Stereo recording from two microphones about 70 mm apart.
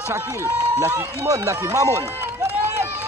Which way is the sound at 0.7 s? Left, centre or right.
Right.